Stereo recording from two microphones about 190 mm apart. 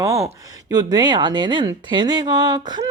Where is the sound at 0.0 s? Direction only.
15° right (ahead or behind).